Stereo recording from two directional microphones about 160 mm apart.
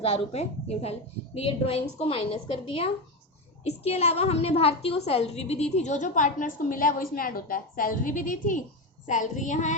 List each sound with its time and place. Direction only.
0.0 s a woman's voice: 40° left (ahead or behind); by 8.6 s 55° left (ahead or behind)
9.0 s child singing: 50° left (ahead or behind)